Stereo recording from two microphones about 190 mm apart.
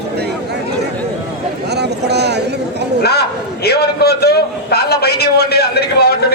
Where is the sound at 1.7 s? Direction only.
60° right (ahead or behind).